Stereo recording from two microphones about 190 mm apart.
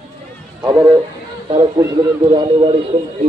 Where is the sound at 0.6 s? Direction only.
20° right (ahead or behind).